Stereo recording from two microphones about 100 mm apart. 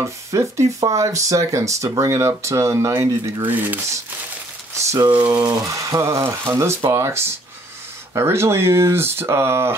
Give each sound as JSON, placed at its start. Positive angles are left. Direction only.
{"t": 0.0, "sound": "speech", "side_deg": -30}
{"t": 3.4, "sound": "speech", "side_deg": -20}
{"t": 4.7, "sound": "a sound", "side_deg": -35}
{"t": 5.3, "sound": "speech", "side_deg": -40}